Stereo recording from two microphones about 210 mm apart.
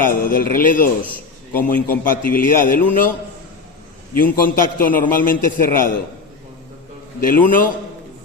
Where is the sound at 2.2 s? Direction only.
40° left (ahead or behind).